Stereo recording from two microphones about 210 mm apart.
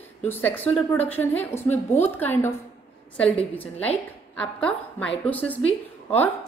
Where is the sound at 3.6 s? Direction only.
5° left (ahead or behind).